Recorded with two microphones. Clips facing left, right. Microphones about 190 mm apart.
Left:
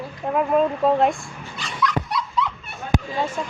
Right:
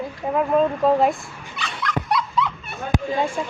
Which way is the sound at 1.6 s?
60° right (ahead or behind).